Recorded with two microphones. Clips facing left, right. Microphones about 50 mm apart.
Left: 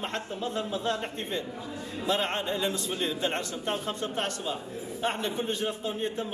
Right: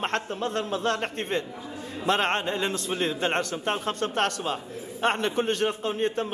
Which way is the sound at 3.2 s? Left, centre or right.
Right.